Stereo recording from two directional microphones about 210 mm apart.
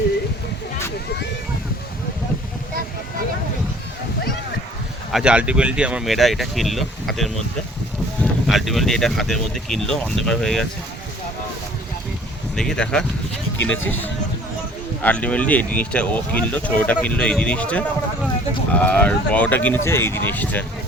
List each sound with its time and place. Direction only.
5.1 s speech: 5° right (ahead or behind)
12.5 s speech: 5° left (ahead or behind)
13.6 s speech: 65° left (ahead or behind)
15.0 s speech: 5° left (ahead or behind)